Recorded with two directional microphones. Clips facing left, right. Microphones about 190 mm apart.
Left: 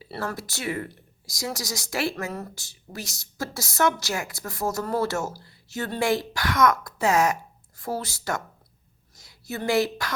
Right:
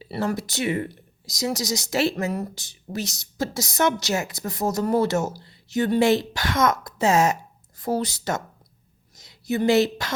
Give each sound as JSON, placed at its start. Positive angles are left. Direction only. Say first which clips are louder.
{"t": 0.0, "sound": "speech", "louder": "right 6 dB", "side_deg": -15}